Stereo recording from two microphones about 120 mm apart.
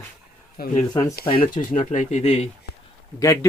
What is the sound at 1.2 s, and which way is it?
Speech, 50° left (ahead or behind).